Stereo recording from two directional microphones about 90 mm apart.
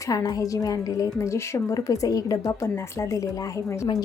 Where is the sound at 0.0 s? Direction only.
45° left (ahead or behind).